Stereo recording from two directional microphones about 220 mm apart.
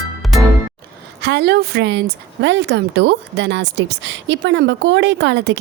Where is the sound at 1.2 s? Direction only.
50° right (ahead or behind).